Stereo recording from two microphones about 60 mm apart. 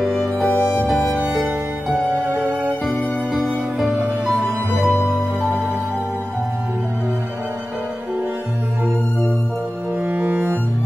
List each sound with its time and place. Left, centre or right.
0.0 s music: centre
2.2 s music: right
3.4 s music: centre
10.0 s music: right